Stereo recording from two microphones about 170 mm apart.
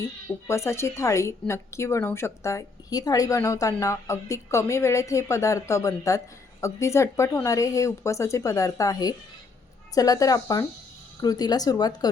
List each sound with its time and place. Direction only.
0.4 s a woman's voice: 15° left (ahead or behind)